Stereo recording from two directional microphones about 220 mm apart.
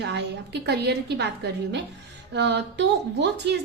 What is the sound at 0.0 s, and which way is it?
A woman's voice, 50° right (ahead or behind).